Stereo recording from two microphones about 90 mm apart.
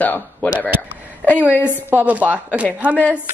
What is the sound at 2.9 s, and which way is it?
Speech, 20° left (ahead or behind).